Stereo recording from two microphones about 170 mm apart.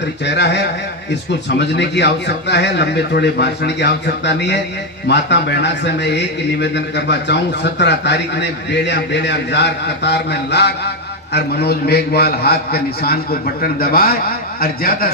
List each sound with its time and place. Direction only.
0.3 s a man's voice: 90° left; by 15.1 s 60° left (ahead or behind)